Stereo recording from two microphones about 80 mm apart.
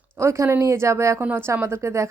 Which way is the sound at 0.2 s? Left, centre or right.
Right.